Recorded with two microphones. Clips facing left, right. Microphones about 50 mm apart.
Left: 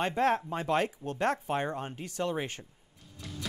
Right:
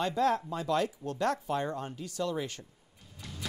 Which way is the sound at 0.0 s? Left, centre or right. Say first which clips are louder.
Left 1 dB; left.